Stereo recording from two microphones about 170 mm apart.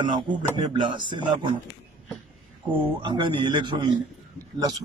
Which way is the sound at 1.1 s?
25° right (ahead or behind).